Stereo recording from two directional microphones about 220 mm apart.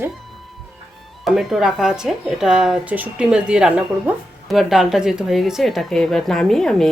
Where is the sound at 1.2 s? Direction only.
Centre (ahead or behind).